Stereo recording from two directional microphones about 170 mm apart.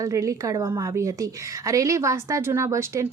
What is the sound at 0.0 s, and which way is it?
A woman's voice, 20° right (ahead or behind).